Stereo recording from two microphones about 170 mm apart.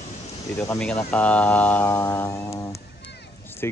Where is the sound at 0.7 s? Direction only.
5° left (ahead or behind).